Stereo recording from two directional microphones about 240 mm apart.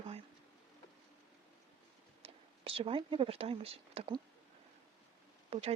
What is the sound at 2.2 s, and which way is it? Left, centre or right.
Speech, right.